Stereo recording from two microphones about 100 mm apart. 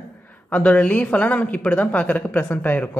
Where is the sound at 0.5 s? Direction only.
15° left (ahead or behind).